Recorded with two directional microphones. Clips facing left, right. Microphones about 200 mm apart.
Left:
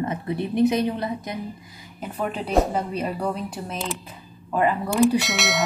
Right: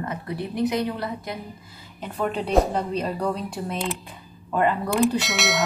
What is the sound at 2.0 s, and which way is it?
Speech, 5° left (ahead or behind).